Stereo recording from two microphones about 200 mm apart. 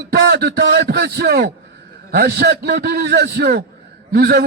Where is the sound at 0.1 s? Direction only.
55° right (ahead or behind).